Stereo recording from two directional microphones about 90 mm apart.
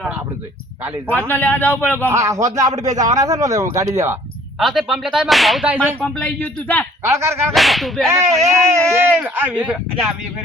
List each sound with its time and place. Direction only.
1.0 s a man's voice: 20° left (ahead or behind)
2.1 s a man's voice: 35° right (ahead or behind)
4.6 s whip: 5° right (ahead or behind)
5.6 s speech: 20° right (ahead or behind)
6.0 s speech: 15° left (ahead or behind)
7.1 s a man's voice: 30° right (ahead or behind)
7.5 s whip: centre (ahead or behind)
8.0 s a man's voice: 30° right (ahead or behind)
9.1 s speech: 20° right (ahead or behind)